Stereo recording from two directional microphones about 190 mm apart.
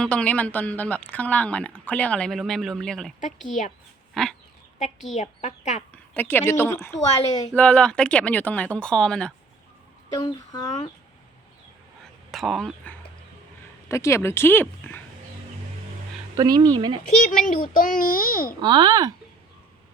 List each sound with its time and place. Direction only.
0.0 s speech: 5° left (ahead or behind)
3.6 s a woman's voice: 40° left (ahead or behind)
4.1 s dog: centre (ahead or behind)
5.1 s a woman's voice: 40° left (ahead or behind)
5.9 s a woman's voice: 10° left (ahead or behind)
10.2 s speech: 20° left (ahead or behind)
12.3 s speech: centre (ahead or behind)
13.8 s speech: 15° left (ahead or behind)
16.3 s speech: 20° right (ahead or behind)
17.2 s a child's voice: 45° left (ahead or behind)
18.6 s speech: 25° right (ahead or behind)